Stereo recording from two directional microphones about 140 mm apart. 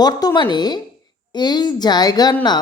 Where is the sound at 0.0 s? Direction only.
25° left (ahead or behind).